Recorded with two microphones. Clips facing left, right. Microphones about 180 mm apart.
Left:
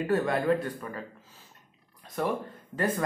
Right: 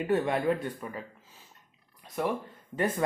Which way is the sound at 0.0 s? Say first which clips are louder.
Even; 20° right (ahead or behind).